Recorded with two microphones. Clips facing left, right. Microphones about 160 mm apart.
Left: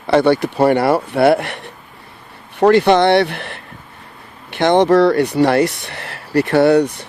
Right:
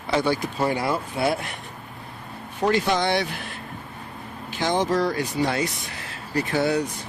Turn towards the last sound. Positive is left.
turn(degrees=70)  # may be behind; listen again after turning